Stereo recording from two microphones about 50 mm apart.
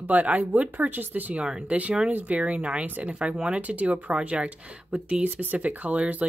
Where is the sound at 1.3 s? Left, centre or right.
Right.